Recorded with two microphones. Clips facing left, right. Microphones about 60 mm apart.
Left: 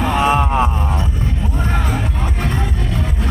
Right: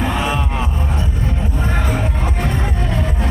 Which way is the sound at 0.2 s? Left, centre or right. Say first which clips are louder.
Left 6 dB; left.